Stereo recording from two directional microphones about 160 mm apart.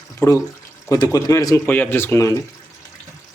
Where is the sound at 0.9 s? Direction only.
25° left (ahead or behind).